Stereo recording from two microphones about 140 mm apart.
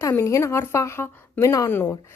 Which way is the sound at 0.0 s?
20° left (ahead or behind).